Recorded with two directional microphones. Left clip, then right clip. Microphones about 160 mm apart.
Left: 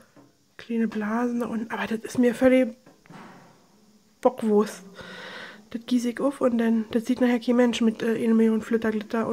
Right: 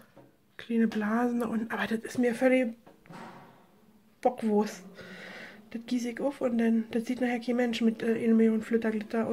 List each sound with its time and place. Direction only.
0.6 s speech: 10° left (ahead or behind)
2.0 s speech: 30° left (ahead or behind)
4.2 s speech: 35° left (ahead or behind)